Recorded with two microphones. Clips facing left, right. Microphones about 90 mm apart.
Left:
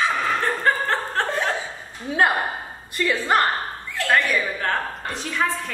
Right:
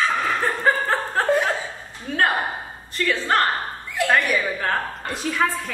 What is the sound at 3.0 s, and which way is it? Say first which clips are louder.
Speech: left 1 dB; 15° left (ahead or behind).